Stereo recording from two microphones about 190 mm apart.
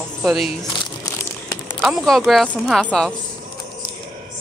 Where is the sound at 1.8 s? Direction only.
Centre (ahead or behind).